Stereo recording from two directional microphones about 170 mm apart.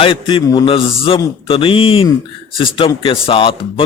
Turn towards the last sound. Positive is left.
turn(degrees=30)  # may be behind; listen again after turning